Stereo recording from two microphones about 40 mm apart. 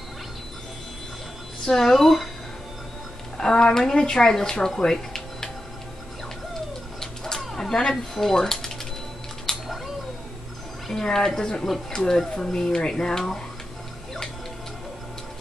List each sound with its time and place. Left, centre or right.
1.7 s speech: centre
3.3 s speech: centre
4.6 s music: centre
7.0 s a sound: centre
7.9 s speech: centre
9.5 s cat: centre
10.9 s speech: centre